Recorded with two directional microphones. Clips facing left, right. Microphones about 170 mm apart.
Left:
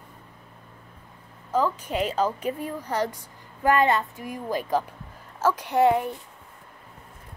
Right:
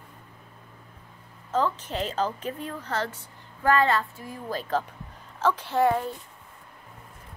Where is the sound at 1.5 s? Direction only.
10° left (ahead or behind).